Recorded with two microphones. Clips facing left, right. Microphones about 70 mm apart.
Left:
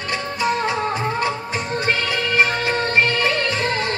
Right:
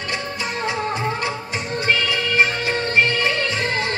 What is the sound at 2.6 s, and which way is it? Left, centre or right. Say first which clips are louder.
Music of bollywood: left 1 dB; left.